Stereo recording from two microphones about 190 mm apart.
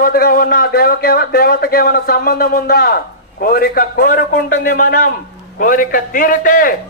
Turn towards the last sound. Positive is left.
turn(degrees=45)  # may be behind; listen again after turning